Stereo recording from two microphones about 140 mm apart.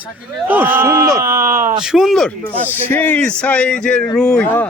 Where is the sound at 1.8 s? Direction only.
5° right (ahead or behind).